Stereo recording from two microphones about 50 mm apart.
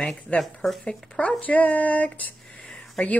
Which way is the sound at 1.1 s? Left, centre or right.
Left.